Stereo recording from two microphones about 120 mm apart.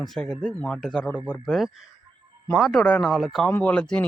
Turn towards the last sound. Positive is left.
turn(degrees=10)  # may be behind; listen again after turning